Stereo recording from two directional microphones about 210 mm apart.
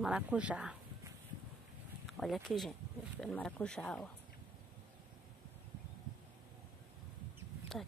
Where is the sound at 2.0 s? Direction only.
Centre (ahead or behind).